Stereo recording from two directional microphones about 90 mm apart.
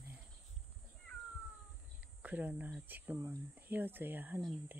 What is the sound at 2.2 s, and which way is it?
Speech, 20° right (ahead or behind).